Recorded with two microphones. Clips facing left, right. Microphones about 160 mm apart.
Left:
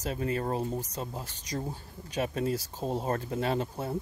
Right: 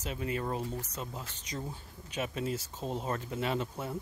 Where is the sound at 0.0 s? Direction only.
40° left (ahead or behind).